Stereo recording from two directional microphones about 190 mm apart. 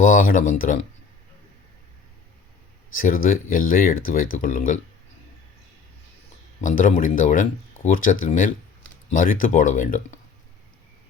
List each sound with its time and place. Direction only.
0.0 s speech: 45° left (ahead or behind)
3.0 s speech: 45° left (ahead or behind)
6.6 s speech: 45° left (ahead or behind)